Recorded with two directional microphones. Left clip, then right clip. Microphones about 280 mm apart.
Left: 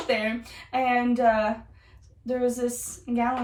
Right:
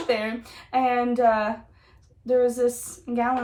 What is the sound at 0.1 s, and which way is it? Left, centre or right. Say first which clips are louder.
Speech: even; centre.